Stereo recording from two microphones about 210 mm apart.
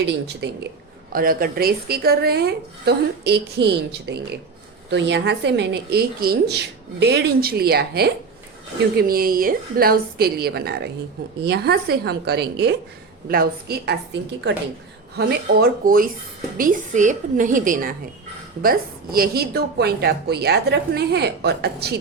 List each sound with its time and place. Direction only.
0.0 s a woman's voice: 55° right (ahead or behind)
1.1 s a woman's voice: 45° right (ahead or behind)